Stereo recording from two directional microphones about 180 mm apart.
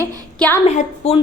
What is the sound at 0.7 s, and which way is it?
Speech, 35° left (ahead or behind).